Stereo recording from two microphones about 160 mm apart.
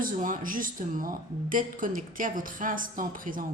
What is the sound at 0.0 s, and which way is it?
Speech, 55° right (ahead or behind).